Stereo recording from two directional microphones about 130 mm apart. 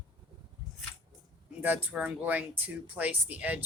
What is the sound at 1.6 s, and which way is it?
Speech, 15° right (ahead or behind).